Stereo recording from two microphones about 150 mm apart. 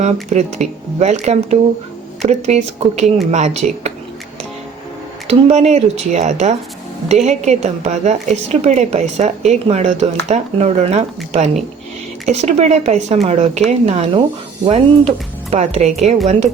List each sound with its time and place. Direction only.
0.0 s a woman's voice: 50° right (ahead or behind)
5.3 s a woman's voice: 50° right (ahead or behind)